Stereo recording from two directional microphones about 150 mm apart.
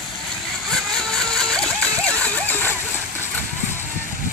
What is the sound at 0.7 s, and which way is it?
Music, 5° left (ahead or behind).